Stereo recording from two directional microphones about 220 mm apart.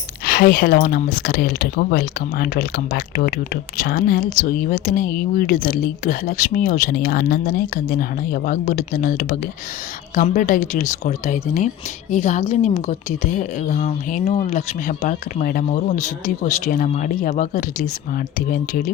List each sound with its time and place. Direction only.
0.3 s speech: 40° left (ahead or behind)